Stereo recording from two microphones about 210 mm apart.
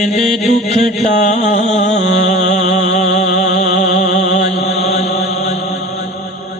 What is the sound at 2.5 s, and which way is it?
Music, 35° left (ahead or behind).